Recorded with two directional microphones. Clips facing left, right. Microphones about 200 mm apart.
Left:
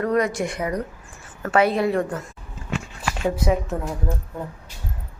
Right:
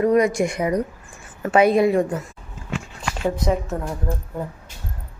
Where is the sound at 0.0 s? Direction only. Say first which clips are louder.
Right 4 dB; 10° right (ahead or behind).